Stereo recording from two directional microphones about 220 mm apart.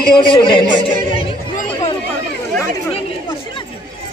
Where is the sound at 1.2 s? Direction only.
25° left (ahead or behind).